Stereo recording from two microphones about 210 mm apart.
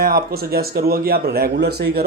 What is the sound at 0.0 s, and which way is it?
A man's voice, 45° right (ahead or behind).